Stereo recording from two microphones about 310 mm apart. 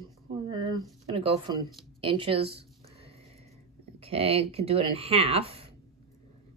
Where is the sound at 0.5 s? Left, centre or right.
Centre.